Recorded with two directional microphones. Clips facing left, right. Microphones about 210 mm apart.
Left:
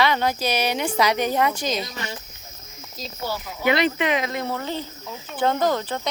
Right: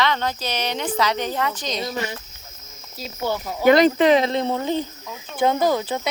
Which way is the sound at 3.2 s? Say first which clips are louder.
Right 6 dB; 45° right (ahead or behind).